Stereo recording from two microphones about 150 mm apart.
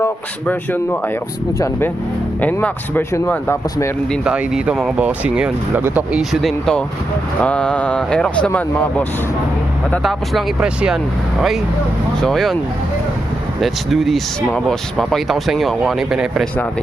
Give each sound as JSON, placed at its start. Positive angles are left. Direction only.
{"t": 0.0, "sound": "speech", "side_deg": 15}
{"t": 4.2, "sound": "speech", "side_deg": -5}
{"t": 10.0, "sound": "speech", "side_deg": 0}
{"t": 13.6, "sound": "speech", "side_deg": 0}